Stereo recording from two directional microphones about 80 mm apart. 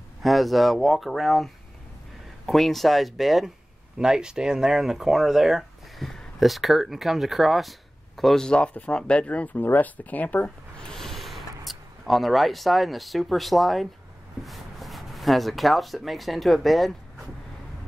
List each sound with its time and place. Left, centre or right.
0.2 s speech: centre
10.8 s speech: centre